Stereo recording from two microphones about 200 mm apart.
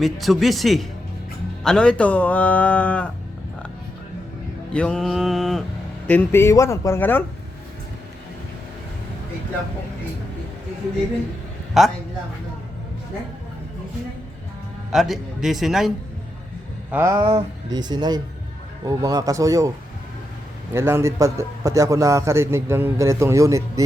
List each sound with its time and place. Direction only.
0.0 s speech: centre (ahead or behind)
4.7 s mantra: 5° left (ahead or behind)
6.1 s speech: 10° left (ahead or behind)
11.8 s speech: centre (ahead or behind)
14.9 s speech: centre (ahead or behind)
16.9 s a man's voice: 10° right (ahead or behind)
17.2 s a man's voice: 25° right (ahead or behind)
20.7 s a man's voice: 10° right (ahead or behind)